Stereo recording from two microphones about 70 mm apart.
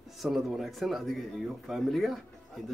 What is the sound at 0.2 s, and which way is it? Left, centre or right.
Speech, centre.